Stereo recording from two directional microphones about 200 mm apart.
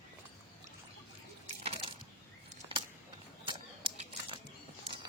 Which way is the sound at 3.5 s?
25° right (ahead or behind).